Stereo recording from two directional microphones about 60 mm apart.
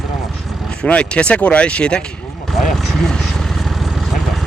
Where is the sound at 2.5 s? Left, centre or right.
Centre.